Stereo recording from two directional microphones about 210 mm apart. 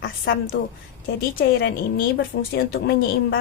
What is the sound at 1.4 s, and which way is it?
A woman's voice, 50° left (ahead or behind).